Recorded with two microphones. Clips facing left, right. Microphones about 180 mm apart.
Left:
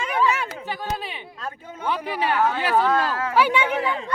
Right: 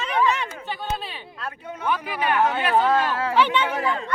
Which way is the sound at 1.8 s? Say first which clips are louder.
Even; 30° left (ahead or behind).